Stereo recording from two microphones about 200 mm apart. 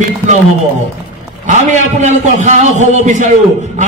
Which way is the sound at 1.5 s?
35° right (ahead or behind).